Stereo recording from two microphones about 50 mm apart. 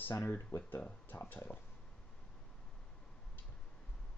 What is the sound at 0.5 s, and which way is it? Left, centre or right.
Speech, left.